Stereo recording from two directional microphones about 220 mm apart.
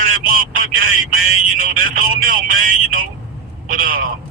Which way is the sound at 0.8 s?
65° right (ahead or behind).